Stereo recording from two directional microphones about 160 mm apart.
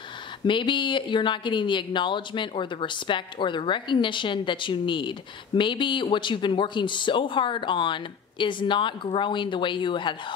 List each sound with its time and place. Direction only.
0.5 s speech: 30° left (ahead or behind)